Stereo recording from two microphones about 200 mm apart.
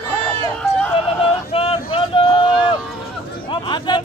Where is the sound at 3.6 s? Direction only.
25° left (ahead or behind).